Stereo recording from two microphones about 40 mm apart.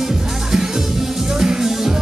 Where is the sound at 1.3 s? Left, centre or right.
Centre.